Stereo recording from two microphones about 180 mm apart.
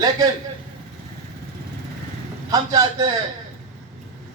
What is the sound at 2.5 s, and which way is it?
Speech, 20° right (ahead or behind).